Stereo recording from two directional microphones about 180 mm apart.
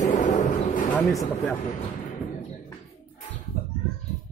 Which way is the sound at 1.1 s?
10° left (ahead or behind).